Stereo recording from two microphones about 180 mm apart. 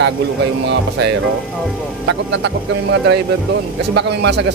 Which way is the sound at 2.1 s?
85° right.